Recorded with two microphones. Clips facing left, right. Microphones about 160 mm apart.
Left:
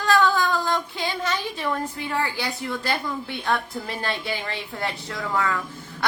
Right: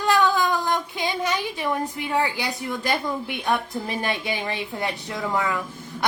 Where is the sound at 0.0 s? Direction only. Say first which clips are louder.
Even; 15° right (ahead or behind).